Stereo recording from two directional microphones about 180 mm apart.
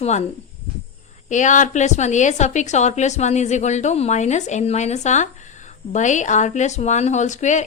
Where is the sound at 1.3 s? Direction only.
45° left (ahead or behind).